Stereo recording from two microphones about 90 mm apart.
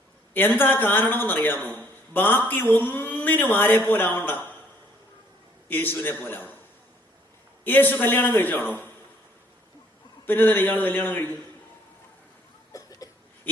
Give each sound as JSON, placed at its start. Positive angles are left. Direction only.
{"t": 0.3, "sound": "a man's voice", "side_deg": 20}
{"t": 5.6, "sound": "a man's voice", "side_deg": 20}
{"t": 7.6, "sound": "a man's voice", "side_deg": 20}
{"t": 10.2, "sound": "a man's voice", "side_deg": 20}
{"t": 12.7, "sound": "cough", "side_deg": 40}